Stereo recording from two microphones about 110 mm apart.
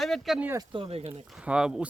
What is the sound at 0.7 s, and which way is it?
Speech, 55° right (ahead or behind).